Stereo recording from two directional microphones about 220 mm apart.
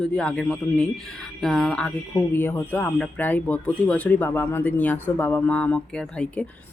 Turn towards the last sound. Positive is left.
turn(degrees=5)  # may be behind; listen again after turning